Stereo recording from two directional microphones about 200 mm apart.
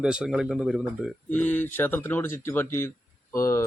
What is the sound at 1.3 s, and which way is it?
Speech, 10° left (ahead or behind).